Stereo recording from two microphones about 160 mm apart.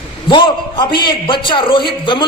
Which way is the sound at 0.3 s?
30° left (ahead or behind).